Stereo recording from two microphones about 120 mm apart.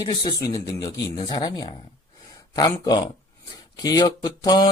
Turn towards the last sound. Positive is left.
turn(degrees=35)  # may be behind; listen again after turning